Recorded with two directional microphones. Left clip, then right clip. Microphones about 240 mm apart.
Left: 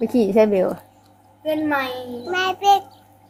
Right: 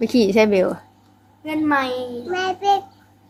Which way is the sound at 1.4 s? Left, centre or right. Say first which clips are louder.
Right 1 dB; right.